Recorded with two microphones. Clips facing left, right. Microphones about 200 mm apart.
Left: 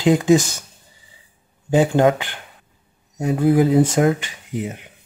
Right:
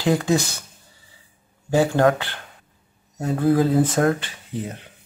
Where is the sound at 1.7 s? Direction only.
20° left (ahead or behind).